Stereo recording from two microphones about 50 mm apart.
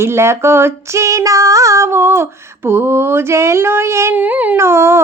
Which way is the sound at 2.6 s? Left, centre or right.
Right.